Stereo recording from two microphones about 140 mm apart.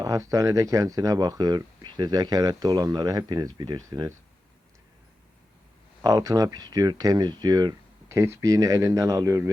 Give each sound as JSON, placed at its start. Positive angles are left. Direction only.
{"t": 0.0, "sound": "speech", "side_deg": -25}
{"t": 6.0, "sound": "speech", "side_deg": -25}